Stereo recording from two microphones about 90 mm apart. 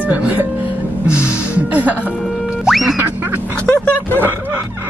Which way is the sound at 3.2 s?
25° right (ahead or behind).